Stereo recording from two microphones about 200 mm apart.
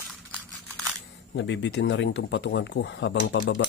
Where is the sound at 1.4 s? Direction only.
65° left (ahead or behind).